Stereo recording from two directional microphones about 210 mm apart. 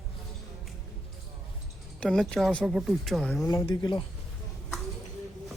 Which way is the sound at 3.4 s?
15° left (ahead or behind).